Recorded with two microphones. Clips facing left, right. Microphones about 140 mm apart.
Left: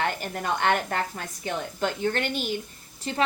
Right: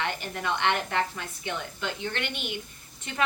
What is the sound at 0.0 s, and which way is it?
A woman's voice, 45° left (ahead or behind).